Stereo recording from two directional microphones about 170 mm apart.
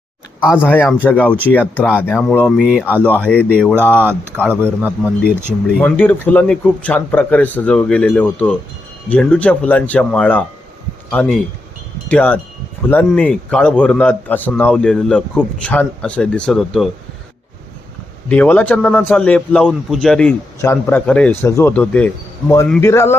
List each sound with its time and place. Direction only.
0.5 s a man's voice: 10° left (ahead or behind)
2.6 s speech: 10° right (ahead or behind)
3.0 s speech: 5° left (ahead or behind)
3.8 s speech: 10° right (ahead or behind)
5.6 s a man's voice: 10° left (ahead or behind)
18.3 s a man's voice: 10° left (ahead or behind)
20.6 s speech: 15° left (ahead or behind)